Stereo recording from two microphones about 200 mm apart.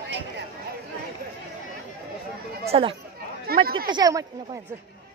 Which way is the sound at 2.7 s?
25° right (ahead or behind).